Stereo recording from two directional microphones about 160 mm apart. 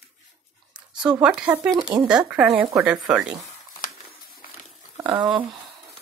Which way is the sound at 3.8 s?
65° left (ahead or behind).